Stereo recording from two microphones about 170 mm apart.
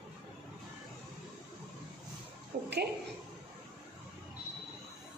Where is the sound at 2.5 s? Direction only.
60° right (ahead or behind).